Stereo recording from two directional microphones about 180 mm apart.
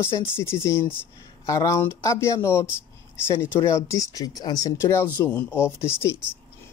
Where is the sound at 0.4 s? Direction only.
15° left (ahead or behind).